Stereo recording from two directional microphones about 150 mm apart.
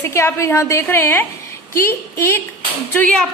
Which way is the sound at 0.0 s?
20° left (ahead or behind).